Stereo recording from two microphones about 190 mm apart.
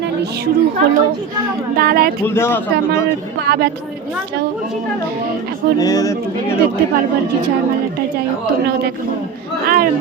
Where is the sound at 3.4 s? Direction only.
60° right (ahead or behind).